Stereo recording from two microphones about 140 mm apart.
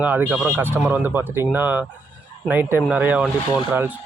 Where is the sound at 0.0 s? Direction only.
10° right (ahead or behind).